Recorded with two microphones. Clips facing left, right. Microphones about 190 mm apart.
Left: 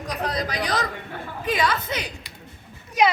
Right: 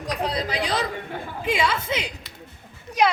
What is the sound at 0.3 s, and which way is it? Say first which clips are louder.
Speech: even; 25° right (ahead or behind).